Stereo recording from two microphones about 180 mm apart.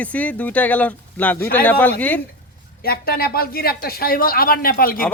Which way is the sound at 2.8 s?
55° left (ahead or behind).